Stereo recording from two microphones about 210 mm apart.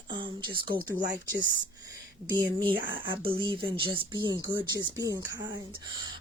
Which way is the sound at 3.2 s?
25° right (ahead or behind).